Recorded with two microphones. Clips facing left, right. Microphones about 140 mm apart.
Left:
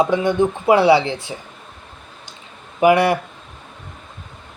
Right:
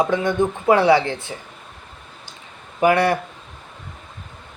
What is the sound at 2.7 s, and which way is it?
Speech, 15° left (ahead or behind).